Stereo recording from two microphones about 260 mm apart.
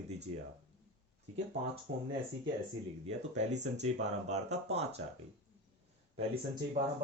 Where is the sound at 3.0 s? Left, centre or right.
Right.